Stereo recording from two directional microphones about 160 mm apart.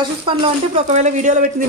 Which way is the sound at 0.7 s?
45° right (ahead or behind).